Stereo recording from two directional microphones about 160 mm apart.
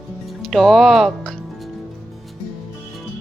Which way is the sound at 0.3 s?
Centre (ahead or behind).